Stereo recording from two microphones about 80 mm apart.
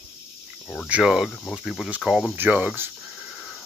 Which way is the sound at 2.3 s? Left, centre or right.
Right.